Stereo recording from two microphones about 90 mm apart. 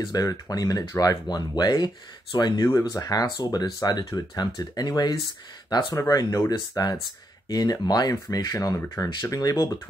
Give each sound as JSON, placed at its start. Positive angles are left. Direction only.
{"t": 0.0, "sound": "speech", "side_deg": 45}
{"t": 6.0, "sound": "speech", "side_deg": 35}
{"t": 8.7, "sound": "speech", "side_deg": 25}
{"t": 9.0, "sound": "speech", "side_deg": 40}